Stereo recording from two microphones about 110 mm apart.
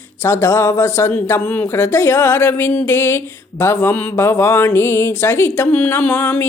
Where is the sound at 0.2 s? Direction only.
25° left (ahead or behind).